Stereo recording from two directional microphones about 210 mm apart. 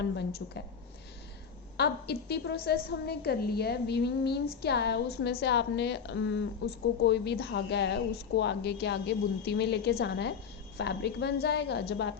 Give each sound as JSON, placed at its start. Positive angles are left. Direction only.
{"t": 0.2, "sound": "a woman's voice", "side_deg": 50}
{"t": 1.7, "sound": "a woman's voice", "side_deg": 50}